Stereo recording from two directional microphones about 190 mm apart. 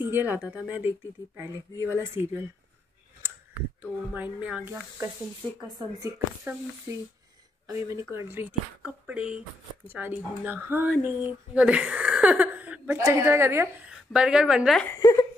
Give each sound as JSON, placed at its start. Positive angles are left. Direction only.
{"t": 0.0, "sound": "speech", "side_deg": -10}
{"t": 4.1, "sound": "speech", "side_deg": -10}
{"t": 7.6, "sound": "speech", "side_deg": -15}
{"t": 14.9, "sound": "speech", "side_deg": 15}